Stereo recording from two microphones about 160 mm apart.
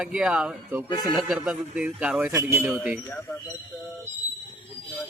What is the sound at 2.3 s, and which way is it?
Speech, 20° right (ahead or behind).